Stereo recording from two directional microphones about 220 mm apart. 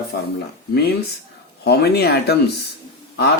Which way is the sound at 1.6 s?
50° left (ahead or behind).